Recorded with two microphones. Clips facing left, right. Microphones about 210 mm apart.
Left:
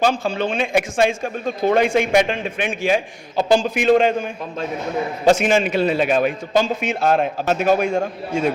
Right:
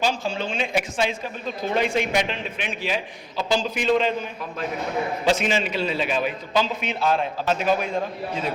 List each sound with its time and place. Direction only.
0.0 s a man's voice: 55° left (ahead or behind)
5.2 s a man's voice: 45° left (ahead or behind)